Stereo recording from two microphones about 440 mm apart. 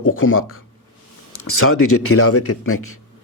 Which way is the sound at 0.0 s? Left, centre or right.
Left.